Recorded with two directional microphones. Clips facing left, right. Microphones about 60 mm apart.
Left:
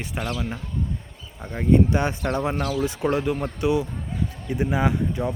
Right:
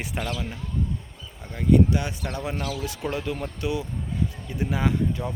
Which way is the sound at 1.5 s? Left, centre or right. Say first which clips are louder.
Left 1 dB; left.